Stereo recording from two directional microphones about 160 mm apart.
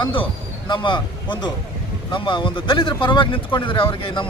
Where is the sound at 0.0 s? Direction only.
30° left (ahead or behind).